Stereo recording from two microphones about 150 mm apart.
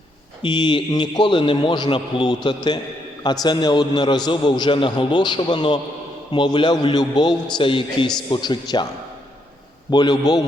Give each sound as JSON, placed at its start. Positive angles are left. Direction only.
{"t": 0.4, "sound": "a man's voice", "side_deg": 30}
{"t": 9.9, "sound": "a man's voice", "side_deg": 30}